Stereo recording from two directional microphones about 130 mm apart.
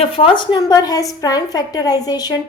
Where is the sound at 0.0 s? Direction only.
45° left (ahead or behind).